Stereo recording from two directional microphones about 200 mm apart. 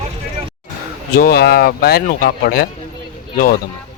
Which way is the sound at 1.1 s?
50° left (ahead or behind).